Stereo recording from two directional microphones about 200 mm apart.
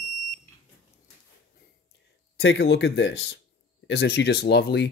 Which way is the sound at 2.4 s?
60° left (ahead or behind).